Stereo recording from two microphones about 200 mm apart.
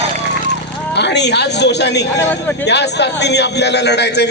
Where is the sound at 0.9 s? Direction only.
60° left (ahead or behind).